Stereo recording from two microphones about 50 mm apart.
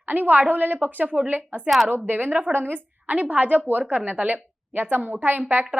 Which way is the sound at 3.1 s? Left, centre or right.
Right.